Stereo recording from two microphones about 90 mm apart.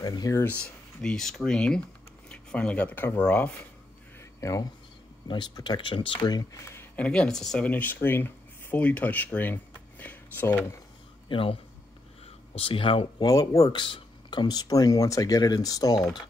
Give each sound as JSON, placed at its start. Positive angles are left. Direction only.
{"t": 0.0, "sound": "speech", "side_deg": 45}
{"t": 0.5, "sound": "speech", "side_deg": 10}
{"t": 4.2, "sound": "a sound", "side_deg": 40}
{"t": 5.3, "sound": "speech", "side_deg": 55}
{"t": 6.2, "sound": "speech", "side_deg": 50}
{"t": 6.6, "sound": "a sound", "side_deg": 30}
{"t": 7.0, "sound": "speech", "side_deg": 10}
{"t": 11.2, "sound": "speech", "side_deg": 75}
{"t": 12.5, "sound": "speech", "side_deg": 85}
{"t": 13.2, "sound": "speech", "side_deg": 45}
{"t": 13.7, "sound": "speech", "side_deg": 65}